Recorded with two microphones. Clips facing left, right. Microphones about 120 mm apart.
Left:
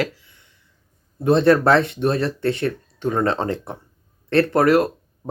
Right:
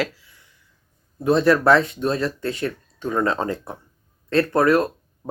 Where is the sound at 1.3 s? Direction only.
60° left (ahead or behind).